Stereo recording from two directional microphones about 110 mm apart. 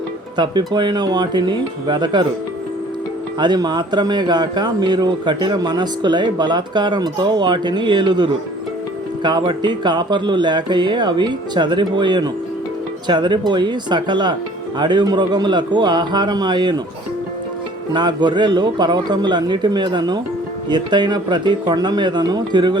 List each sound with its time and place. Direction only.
0.3 s speech: 45° right (ahead or behind)
3.3 s speech: 40° right (ahead or behind)
17.9 s speech: 45° right (ahead or behind)